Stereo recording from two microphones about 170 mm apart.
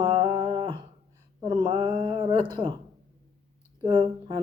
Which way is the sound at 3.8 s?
25° right (ahead or behind).